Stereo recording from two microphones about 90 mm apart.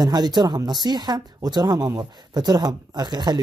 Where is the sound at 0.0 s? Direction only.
50° right (ahead or behind).